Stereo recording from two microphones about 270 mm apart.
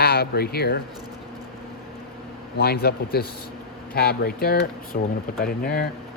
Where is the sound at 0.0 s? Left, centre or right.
Left.